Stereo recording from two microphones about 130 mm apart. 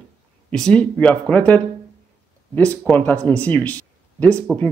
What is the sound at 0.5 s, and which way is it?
Speech, 5° left (ahead or behind).